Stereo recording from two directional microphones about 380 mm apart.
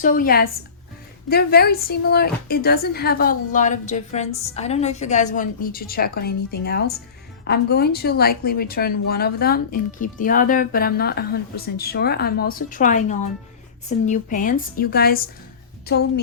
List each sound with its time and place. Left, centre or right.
0.0 s speech: left